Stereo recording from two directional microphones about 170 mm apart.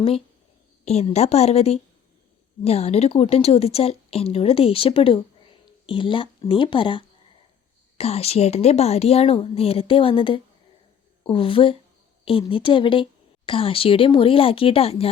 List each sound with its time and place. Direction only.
0.9 s a woman's voice: 40° left (ahead or behind)